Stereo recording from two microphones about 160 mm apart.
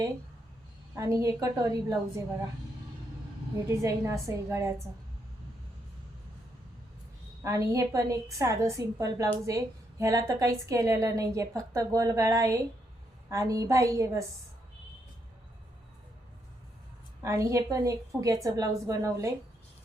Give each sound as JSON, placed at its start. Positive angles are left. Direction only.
{"t": 0.9, "sound": "a woman's voice", "side_deg": -20}
{"t": 3.7, "sound": "a woman's voice", "side_deg": -20}
{"t": 7.4, "sound": "a woman's voice", "side_deg": -20}
{"t": 17.2, "sound": "a woman's voice", "side_deg": -20}